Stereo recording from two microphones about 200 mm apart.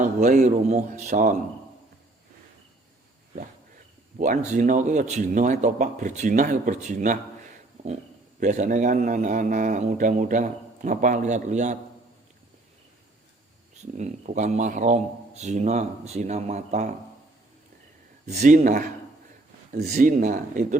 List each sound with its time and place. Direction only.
0.0 s a man's voice: 40° right (ahead or behind)
4.2 s a man's voice: 35° right (ahead or behind)
13.9 s a man's voice: 35° right (ahead or behind)
18.3 s a man's voice: 35° right (ahead or behind)